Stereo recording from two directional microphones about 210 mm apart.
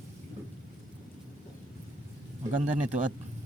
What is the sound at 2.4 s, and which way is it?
Speech, 35° right (ahead or behind).